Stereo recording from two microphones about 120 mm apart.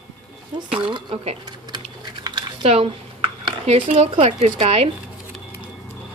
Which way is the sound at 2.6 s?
55° right (ahead or behind).